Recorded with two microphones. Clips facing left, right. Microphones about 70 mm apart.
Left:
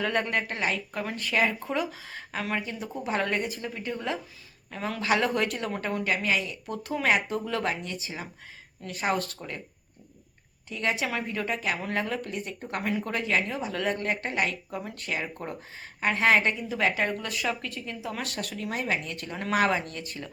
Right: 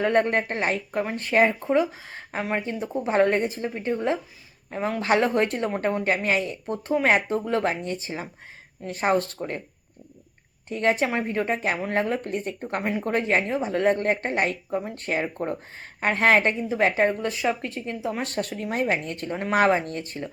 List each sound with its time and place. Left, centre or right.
0.0 s a woman's voice: right
10.7 s a woman's voice: right